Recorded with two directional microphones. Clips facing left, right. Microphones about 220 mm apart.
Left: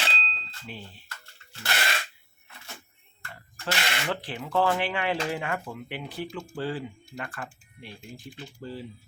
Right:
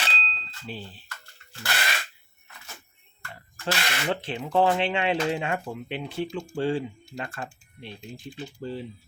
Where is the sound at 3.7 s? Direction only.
25° right (ahead or behind).